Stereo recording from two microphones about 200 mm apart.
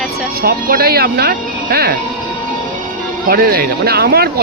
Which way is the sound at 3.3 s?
50° right (ahead or behind).